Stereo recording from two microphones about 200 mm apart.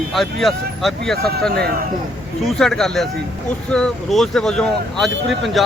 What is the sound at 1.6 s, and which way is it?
Speech, 50° right (ahead or behind).